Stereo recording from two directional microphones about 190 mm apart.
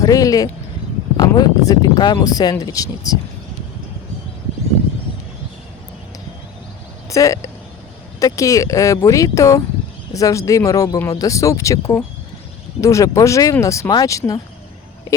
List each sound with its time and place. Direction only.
0.0 s speech: 20° left (ahead or behind)
7.1 s speech: 15° left (ahead or behind)